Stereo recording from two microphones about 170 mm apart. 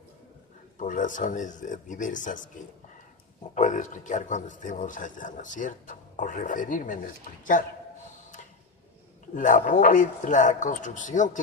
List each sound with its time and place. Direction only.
0.8 s speech: 50° left (ahead or behind)
3.5 s speech: 45° left (ahead or behind)
9.3 s speech: 50° left (ahead or behind)